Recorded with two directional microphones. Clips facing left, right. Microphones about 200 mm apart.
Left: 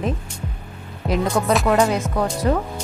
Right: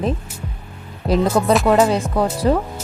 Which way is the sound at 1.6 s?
30° right (ahead or behind).